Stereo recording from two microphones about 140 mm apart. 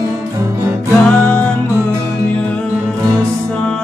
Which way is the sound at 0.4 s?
20° right (ahead or behind).